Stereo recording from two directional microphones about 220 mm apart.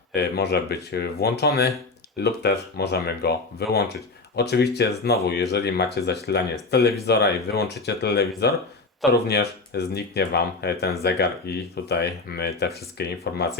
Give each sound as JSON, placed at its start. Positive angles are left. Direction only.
{"t": 0.1, "sound": "speech", "side_deg": 45}